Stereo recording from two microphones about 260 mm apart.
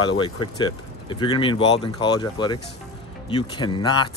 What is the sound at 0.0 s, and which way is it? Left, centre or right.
Speech, centre.